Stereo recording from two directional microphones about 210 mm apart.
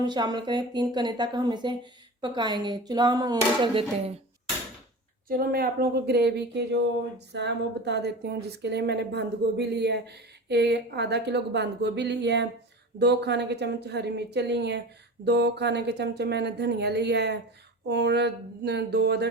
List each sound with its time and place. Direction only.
0.0 s speech: 20° right (ahead or behind)
5.3 s speech: 45° right (ahead or behind)